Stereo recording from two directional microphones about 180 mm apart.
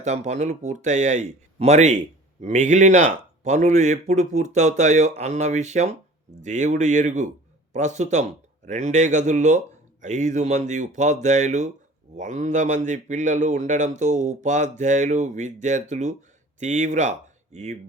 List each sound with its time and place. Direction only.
0.0 s a man's voice: 40° right (ahead or behind)